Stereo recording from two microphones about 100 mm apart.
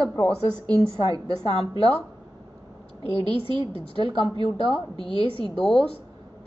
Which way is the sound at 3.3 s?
55° right (ahead or behind).